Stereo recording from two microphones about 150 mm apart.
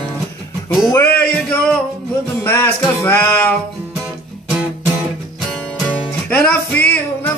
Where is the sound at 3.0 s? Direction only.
15° left (ahead or behind).